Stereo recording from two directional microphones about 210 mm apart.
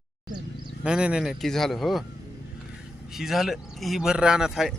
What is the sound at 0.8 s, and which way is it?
Speech, 5° right (ahead or behind).